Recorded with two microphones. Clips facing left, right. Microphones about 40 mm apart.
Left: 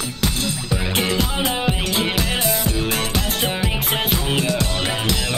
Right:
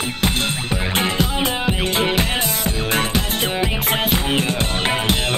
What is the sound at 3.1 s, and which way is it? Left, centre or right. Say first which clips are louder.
Music: right 2 dB; right.